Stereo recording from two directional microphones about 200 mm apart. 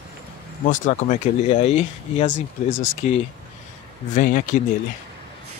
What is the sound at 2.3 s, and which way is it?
Speech, 70° left (ahead or behind).